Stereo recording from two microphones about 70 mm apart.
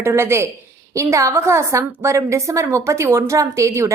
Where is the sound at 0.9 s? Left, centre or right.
Right.